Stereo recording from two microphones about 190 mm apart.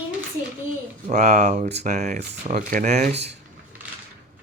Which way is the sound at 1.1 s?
40° right (ahead or behind).